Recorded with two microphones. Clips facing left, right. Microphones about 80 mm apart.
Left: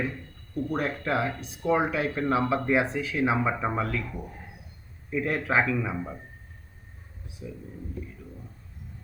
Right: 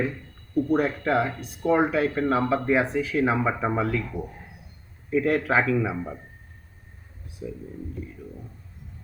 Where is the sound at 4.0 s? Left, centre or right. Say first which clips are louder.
Right 4 dB; right.